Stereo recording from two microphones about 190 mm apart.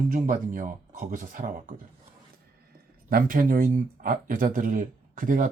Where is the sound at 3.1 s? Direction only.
45° right (ahead or behind).